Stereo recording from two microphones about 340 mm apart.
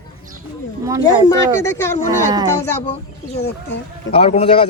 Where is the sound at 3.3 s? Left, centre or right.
Left.